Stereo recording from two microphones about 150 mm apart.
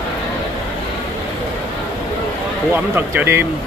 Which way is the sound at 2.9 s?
15° right (ahead or behind).